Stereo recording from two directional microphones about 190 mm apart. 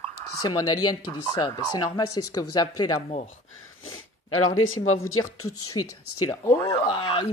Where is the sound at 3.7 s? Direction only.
90° left.